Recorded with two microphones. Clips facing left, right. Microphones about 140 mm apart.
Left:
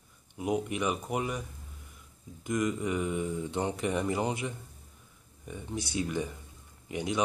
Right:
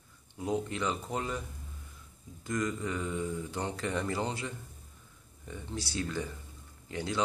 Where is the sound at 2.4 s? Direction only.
20° left (ahead or behind).